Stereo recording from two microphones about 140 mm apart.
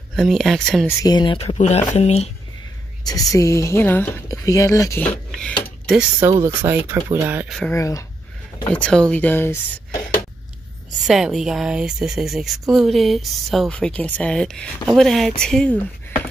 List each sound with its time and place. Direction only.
0.1 s speech: centre (ahead or behind)
1.0 s speech: 30° left (ahead or behind)
1.6 s speech: 50° left (ahead or behind)
3.1 s a woman's voice: 25° left (ahead or behind)
5.1 s a sound: 10° left (ahead or behind)
6.4 s speech: 15° right (ahead or behind)
7.4 s speech: centre (ahead or behind)
7.7 s a woman's voice: 20° left (ahead or behind)
8.6 s speech: 10° left (ahead or behind)
11.0 s speech: 5° right (ahead or behind)